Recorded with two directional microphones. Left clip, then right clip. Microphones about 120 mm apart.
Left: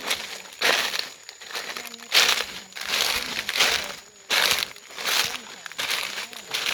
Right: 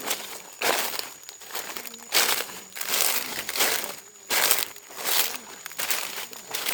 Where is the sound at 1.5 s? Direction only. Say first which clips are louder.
Left 3 dB; 25° right (ahead or behind).